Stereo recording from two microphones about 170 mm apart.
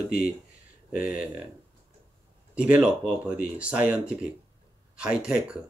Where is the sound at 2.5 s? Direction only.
5° right (ahead or behind).